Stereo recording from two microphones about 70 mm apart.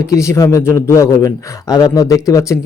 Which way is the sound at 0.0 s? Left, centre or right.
Left.